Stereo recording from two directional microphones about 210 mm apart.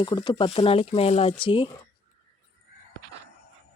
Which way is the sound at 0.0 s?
20° left (ahead or behind).